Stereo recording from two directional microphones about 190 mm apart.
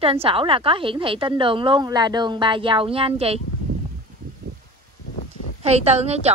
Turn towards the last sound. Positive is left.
turn(degrees=-35)  # may be behind; listen again after turning